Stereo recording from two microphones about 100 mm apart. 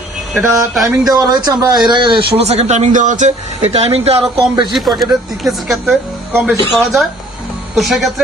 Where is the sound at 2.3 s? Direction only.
90° right.